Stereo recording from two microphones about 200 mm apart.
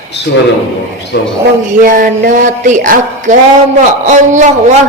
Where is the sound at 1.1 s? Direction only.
60° left (ahead or behind).